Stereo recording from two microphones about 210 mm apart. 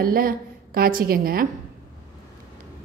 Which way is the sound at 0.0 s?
45° right (ahead or behind).